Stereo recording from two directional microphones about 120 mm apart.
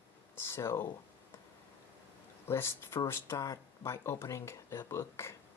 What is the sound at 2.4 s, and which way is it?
Speech, 20° left (ahead or behind).